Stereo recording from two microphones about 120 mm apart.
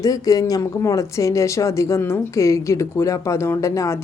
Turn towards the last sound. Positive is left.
turn(degrees=25)  # may be behind; listen again after turning